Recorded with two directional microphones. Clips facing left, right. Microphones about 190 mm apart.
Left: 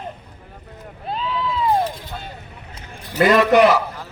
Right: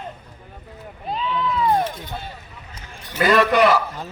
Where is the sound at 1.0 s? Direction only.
Centre (ahead or behind).